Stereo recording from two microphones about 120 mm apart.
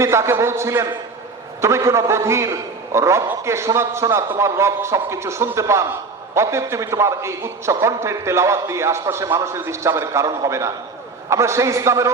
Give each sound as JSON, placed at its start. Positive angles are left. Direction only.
{"t": 0.0, "sound": "a man's voice", "side_deg": -20}